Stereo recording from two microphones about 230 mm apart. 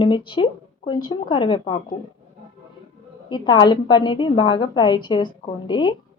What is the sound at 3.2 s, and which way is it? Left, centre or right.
A woman's voice, centre.